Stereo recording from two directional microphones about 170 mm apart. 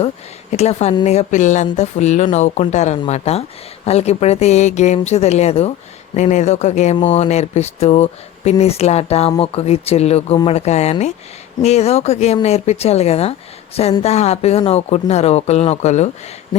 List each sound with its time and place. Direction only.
0.5 s speech: 40° left (ahead or behind)